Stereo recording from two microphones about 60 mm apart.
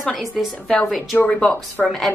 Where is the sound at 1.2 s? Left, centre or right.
Centre.